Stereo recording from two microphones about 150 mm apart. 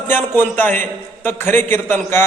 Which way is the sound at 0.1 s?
15° left (ahead or behind).